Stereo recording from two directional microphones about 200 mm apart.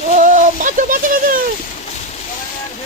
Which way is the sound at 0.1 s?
40° right (ahead or behind).